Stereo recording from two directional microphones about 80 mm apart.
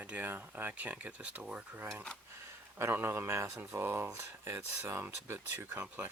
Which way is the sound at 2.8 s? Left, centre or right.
Right.